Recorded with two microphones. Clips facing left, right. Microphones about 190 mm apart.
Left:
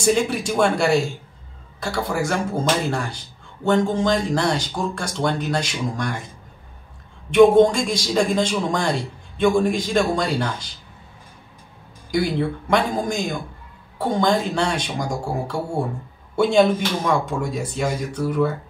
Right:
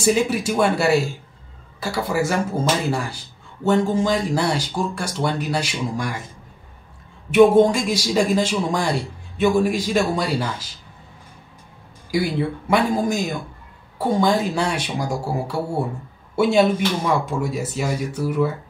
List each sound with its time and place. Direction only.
0.0 s a man's voice: 5° right (ahead or behind)
7.2 s a man's voice: 5° right (ahead or behind)
12.1 s a man's voice: 5° right (ahead or behind)